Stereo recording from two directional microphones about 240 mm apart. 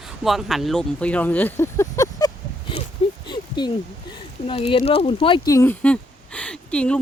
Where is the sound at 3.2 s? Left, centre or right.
Centre.